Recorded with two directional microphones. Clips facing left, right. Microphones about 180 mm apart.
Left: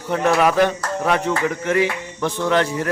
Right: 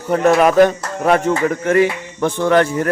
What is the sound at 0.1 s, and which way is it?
A man's voice, 45° right (ahead or behind).